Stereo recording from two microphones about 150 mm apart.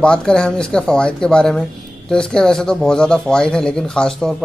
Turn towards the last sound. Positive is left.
turn(degrees=5)  # may be behind; listen again after turning